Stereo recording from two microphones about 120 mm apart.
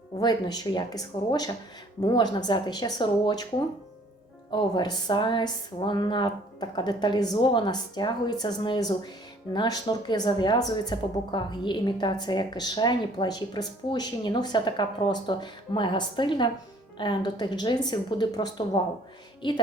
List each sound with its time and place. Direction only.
0.2 s a woman's voice: 35° left (ahead or behind)
4.5 s a woman's voice: 35° left (ahead or behind)